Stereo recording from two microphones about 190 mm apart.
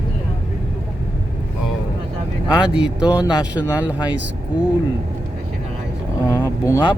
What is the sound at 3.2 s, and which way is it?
Speech, 20° left (ahead or behind).